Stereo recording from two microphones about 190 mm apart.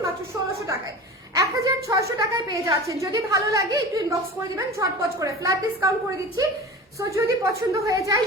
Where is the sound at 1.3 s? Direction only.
15° right (ahead or behind).